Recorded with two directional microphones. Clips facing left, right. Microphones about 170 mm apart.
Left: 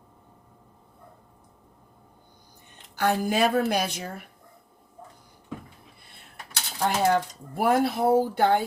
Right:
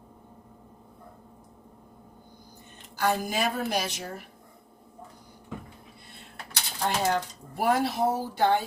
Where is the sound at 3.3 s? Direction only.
60° left (ahead or behind).